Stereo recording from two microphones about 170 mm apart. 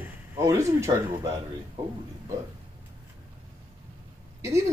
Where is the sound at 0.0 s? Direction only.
15° right (ahead or behind).